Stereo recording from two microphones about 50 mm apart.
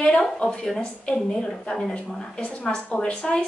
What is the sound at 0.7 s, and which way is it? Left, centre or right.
A woman's voice, centre.